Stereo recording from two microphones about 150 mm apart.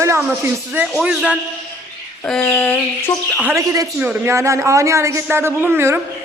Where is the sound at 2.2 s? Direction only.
5° left (ahead or behind).